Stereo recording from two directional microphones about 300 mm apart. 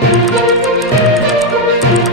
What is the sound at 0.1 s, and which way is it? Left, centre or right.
Music, centre.